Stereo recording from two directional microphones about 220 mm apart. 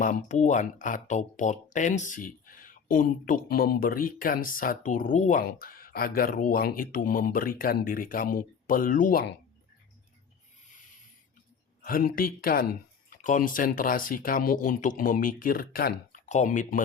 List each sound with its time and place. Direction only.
0.0 s speech: 35° left (ahead or behind)
11.8 s speech: 40° left (ahead or behind)